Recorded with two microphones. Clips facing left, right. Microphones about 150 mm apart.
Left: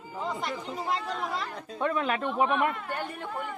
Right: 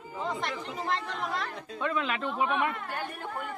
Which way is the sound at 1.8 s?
35° left (ahead or behind).